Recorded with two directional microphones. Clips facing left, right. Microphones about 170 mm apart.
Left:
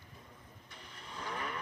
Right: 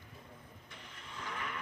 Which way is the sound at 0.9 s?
35° left (ahead or behind).